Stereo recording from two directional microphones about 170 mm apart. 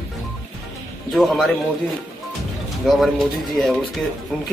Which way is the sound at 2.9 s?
Centre (ahead or behind).